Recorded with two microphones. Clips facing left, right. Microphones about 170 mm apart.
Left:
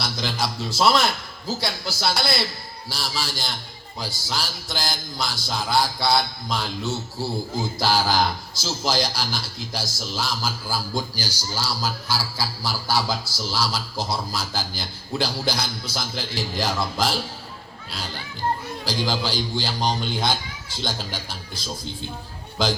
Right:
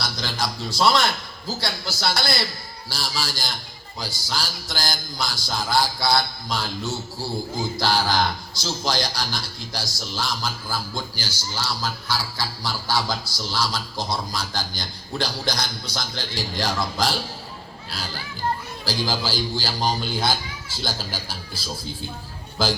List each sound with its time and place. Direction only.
0.3 s music: 5° left (ahead or behind)
18.9 s music: 5° right (ahead or behind)
20.8 s speech: 5° right (ahead or behind)
22.6 s music: 5° right (ahead or behind)